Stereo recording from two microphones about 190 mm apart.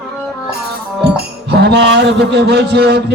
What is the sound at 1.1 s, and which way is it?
Speech, 60° right (ahead or behind).